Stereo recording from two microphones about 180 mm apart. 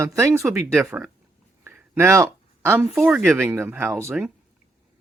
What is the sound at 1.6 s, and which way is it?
Speech, 10° right (ahead or behind).